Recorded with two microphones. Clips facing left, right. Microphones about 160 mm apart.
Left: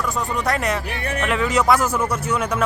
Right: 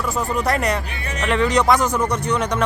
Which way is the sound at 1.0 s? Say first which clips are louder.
Left 2 dB; 55° left (ahead or behind).